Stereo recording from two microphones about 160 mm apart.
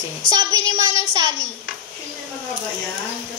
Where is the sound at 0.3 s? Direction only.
25° right (ahead or behind).